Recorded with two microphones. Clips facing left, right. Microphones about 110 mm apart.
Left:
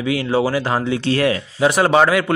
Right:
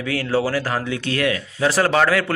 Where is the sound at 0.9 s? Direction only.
30° left (ahead or behind).